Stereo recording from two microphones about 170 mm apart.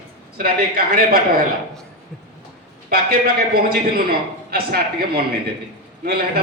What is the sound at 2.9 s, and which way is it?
A man's voice, 65° right (ahead or behind).